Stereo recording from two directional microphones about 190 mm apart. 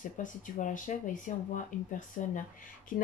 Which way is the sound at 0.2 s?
45° left (ahead or behind).